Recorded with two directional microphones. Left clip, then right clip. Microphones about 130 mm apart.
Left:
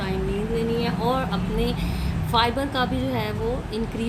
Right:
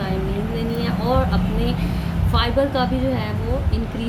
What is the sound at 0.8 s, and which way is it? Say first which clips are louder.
A woman's voice: right 3 dB; 45° left (ahead or behind).